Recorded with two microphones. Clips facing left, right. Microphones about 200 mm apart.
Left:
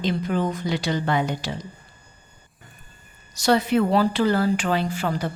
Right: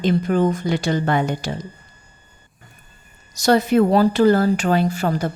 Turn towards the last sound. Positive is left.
turn(degrees=-45)  # may be behind; listen again after turning